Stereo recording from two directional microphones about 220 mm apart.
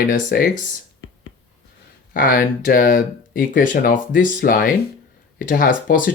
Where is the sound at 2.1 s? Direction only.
40° left (ahead or behind).